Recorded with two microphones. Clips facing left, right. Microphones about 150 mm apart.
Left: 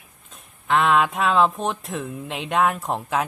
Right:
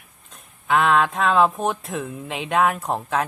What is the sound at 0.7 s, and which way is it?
Speech, centre (ahead or behind).